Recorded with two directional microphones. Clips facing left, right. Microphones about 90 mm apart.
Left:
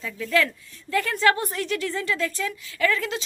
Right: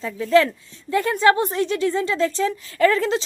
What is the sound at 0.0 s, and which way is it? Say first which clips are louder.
A woman's voice: right 7 dB; 30° right (ahead or behind).